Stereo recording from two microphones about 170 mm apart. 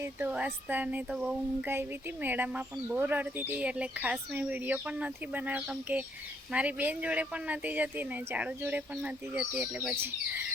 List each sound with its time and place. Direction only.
0.0 s speech: 10° right (ahead or behind)